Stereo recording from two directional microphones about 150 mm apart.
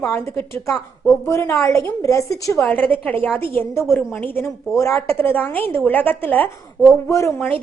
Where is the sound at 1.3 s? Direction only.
20° left (ahead or behind).